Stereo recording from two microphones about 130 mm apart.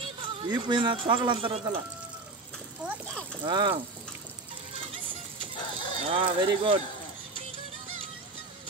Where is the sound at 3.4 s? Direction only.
40° right (ahead or behind).